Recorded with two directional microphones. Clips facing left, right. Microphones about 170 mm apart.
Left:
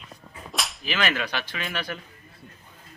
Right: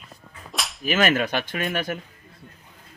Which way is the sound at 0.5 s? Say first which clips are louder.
Even; centre (ahead or behind).